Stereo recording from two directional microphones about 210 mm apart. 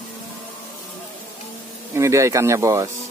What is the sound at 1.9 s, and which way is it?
Speech, 15° right (ahead or behind).